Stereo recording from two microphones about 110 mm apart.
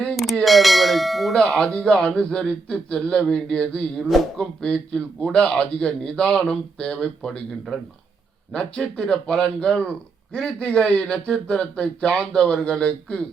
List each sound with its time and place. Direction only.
0.2 s speech: centre (ahead or behind)